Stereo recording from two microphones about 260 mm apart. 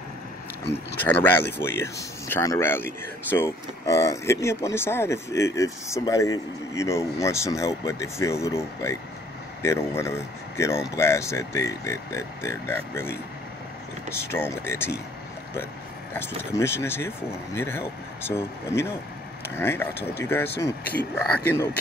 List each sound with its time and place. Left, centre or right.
1.0 s speech: centre
14.3 s speech: centre
16.1 s speech: centre